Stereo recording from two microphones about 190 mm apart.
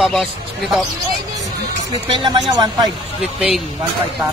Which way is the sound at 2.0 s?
25° right (ahead or behind).